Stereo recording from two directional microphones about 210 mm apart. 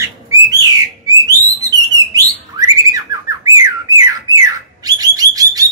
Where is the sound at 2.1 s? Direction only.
15° right (ahead or behind).